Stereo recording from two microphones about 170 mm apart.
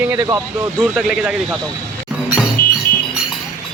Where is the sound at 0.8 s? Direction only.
5° right (ahead or behind).